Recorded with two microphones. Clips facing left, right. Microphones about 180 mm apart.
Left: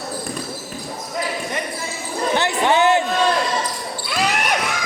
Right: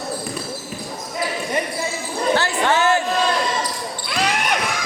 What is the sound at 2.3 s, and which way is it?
Basketball bounce, 20° left (ahead or behind).